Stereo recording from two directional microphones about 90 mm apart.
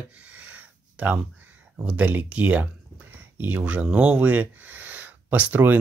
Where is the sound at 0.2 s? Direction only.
15° right (ahead or behind).